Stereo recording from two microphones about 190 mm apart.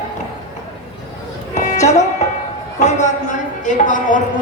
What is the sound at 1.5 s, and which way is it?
Music, 40° left (ahead or behind).